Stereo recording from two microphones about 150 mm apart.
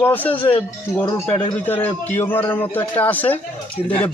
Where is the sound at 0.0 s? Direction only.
10° left (ahead or behind).